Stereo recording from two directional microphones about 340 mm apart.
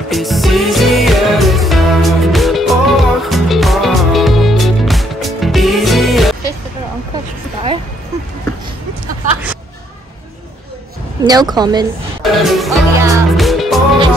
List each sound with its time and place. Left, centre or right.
0.1 s music: centre
11.2 s a woman's voice: centre
12.2 s music: centre